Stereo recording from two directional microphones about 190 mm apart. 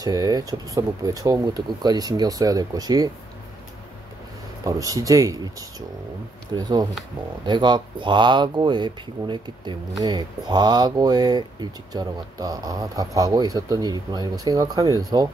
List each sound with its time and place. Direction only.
0.0 s speech: 20° right (ahead or behind)
4.6 s speech: 20° right (ahead or behind)